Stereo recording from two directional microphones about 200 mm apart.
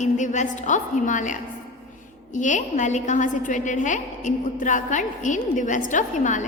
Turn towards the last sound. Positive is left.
turn(degrees=40)  # may be behind; listen again after turning